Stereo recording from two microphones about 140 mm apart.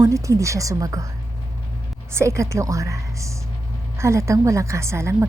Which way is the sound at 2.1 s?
20° right (ahead or behind).